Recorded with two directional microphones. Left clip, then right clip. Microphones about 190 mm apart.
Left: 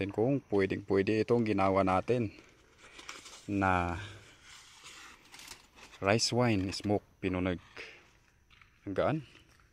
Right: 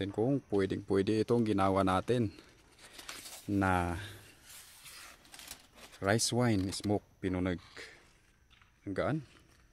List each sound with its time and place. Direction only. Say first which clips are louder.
0.5 s speech: left 2 dB; centre (ahead or behind); by 2.3 s 20° right (ahead or behind)
3.3 s a sound: right 2 dB; 40° right (ahead or behind)
3.5 s speech: left 2 dB; 15° right (ahead or behind)
5.9 s speech: left 2 dB; 5° right (ahead or behind)